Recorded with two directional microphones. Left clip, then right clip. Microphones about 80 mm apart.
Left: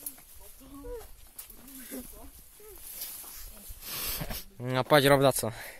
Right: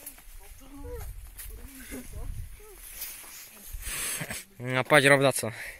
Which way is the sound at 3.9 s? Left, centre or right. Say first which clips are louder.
Right 3 dB; centre.